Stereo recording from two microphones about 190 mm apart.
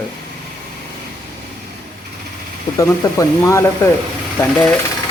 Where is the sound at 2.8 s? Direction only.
15° left (ahead or behind).